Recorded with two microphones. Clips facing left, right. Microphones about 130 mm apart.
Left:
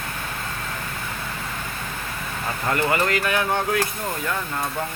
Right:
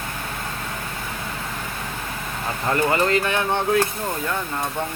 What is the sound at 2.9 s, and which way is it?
Speech, 30° right (ahead or behind).